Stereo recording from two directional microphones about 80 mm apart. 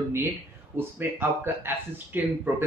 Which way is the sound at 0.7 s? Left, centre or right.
Right.